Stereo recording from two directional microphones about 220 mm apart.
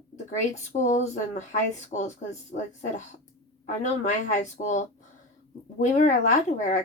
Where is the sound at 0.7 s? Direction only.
35° left (ahead or behind).